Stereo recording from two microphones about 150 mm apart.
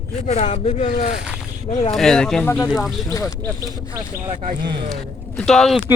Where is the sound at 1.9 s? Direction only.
5° left (ahead or behind).